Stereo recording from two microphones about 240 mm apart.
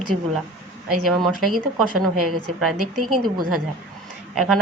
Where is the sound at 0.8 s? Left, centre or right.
Centre.